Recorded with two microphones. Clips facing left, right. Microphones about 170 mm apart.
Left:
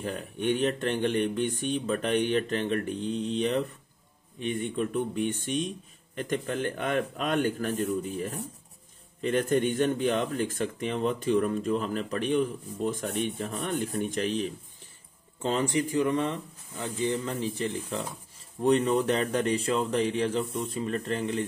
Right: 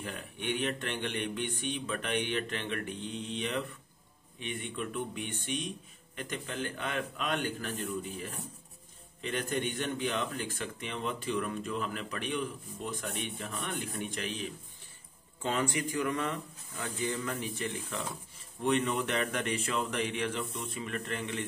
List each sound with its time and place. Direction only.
0.0 s a man's voice: 40° left (ahead or behind)